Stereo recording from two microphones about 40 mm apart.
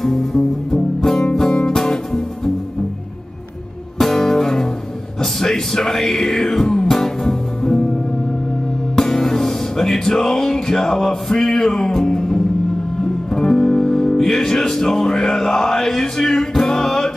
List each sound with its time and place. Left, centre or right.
0.0 s music: centre
1.8 s music: centre
4.0 s music: centre
8.9 s speech: centre
13.0 s music: centre